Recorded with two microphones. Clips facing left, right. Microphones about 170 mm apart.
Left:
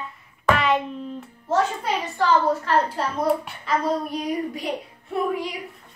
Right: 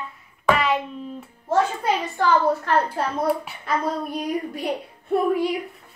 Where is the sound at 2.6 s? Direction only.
55° right (ahead or behind).